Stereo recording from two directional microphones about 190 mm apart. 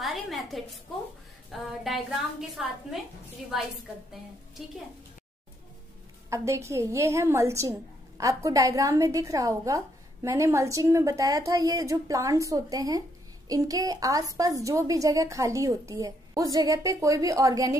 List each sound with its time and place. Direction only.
0.0 s a sound: centre (ahead or behind)
1.5 s a woman's voice: centre (ahead or behind)
6.3 s a woman's voice: 15° right (ahead or behind)